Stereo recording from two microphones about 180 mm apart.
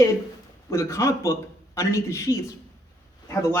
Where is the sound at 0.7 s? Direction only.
15° left (ahead or behind).